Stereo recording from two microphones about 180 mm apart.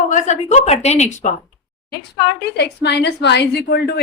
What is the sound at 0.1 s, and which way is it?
A woman's voice, 40° left (ahead or behind).